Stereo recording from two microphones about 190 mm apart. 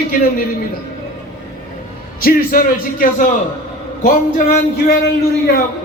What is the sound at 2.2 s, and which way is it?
A man's voice, 50° left (ahead or behind).